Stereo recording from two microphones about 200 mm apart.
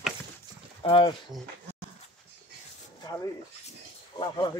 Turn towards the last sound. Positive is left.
turn(degrees=20)  # may be behind; listen again after turning